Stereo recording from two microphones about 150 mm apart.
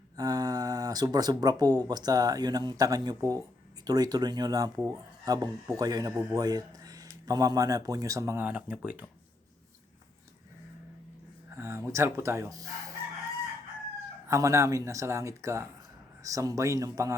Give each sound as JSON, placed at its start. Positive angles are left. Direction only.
{"t": 0.2, "sound": "speech", "side_deg": -25}
{"t": 11.5, "sound": "speech", "side_deg": -20}
{"t": 14.3, "sound": "speech", "side_deg": -20}